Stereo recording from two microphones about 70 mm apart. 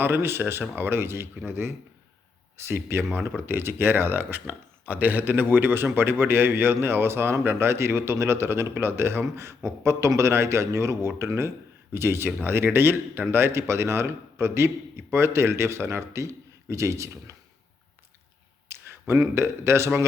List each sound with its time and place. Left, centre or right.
0.0 s speech: right
18.7 s a sound: right
19.3 s speech: right